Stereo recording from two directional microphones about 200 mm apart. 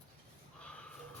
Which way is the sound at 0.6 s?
5° left (ahead or behind).